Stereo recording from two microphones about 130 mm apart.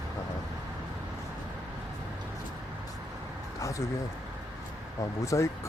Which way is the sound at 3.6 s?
25° left (ahead or behind).